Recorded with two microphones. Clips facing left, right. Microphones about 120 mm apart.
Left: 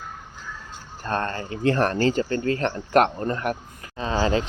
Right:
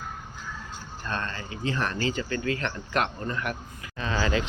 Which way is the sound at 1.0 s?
45° left (ahead or behind).